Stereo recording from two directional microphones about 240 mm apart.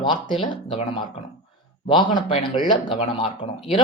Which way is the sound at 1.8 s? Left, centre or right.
Centre.